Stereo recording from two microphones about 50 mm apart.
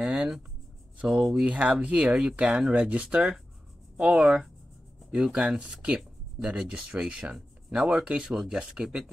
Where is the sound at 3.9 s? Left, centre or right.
Centre.